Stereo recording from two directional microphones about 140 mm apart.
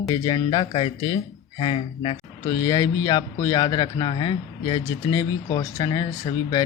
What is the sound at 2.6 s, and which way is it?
A man's voice, 30° left (ahead or behind).